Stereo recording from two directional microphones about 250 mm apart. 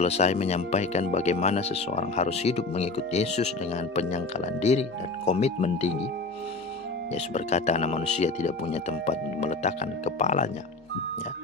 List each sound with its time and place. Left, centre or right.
0.0 s speech: left
7.2 s speech: left